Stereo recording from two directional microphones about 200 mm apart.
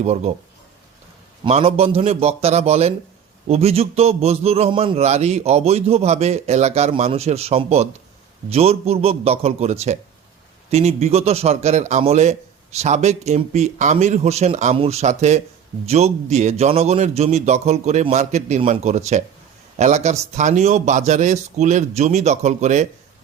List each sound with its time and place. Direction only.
0.0 s a man's voice: 35° right (ahead or behind)
1.5 s a man's voice: 30° right (ahead or behind)